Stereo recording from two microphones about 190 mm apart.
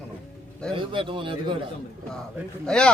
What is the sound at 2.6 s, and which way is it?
Speech, 5° left (ahead or behind).